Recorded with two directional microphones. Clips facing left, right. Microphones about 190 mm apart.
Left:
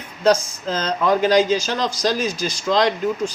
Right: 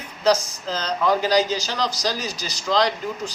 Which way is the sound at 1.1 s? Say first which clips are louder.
Left 4 dB; 50° left (ahead or behind).